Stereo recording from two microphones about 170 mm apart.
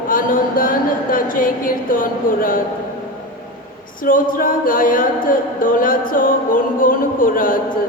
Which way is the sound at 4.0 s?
55° left (ahead or behind).